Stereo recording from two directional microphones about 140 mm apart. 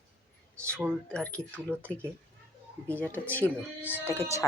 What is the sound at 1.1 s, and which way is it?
Speech, 10° left (ahead or behind).